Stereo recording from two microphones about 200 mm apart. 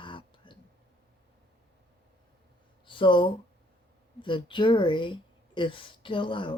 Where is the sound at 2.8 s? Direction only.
25° left (ahead or behind).